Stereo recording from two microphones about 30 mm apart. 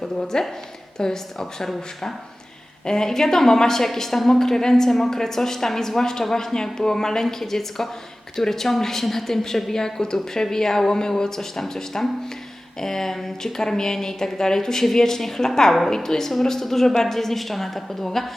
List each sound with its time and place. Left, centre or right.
0.2 s a woman's voice: centre
2.8 s a woman's voice: left